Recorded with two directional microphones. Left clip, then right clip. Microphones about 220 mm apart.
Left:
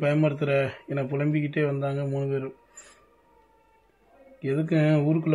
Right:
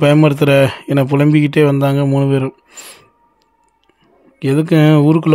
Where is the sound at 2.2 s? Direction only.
50° right (ahead or behind).